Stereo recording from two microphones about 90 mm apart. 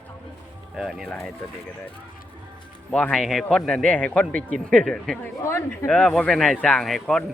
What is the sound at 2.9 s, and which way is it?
Speech, 10° left (ahead or behind).